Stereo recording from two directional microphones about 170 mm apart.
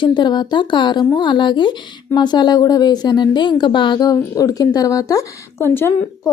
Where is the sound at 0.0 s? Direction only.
25° left (ahead or behind).